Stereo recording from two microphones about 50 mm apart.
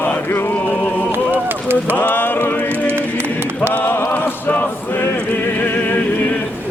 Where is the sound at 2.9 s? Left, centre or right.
Right.